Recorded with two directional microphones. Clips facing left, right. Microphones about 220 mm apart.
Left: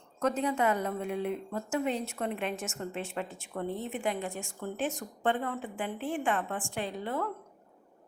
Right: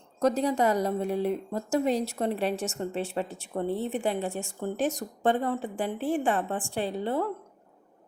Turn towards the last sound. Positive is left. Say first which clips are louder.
# right 5 dB
turn(degrees=-30)  # may be behind; listen again after turning